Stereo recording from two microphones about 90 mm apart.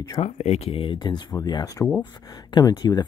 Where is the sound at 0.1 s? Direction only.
90° left; by 1.2 s 60° left (ahead or behind).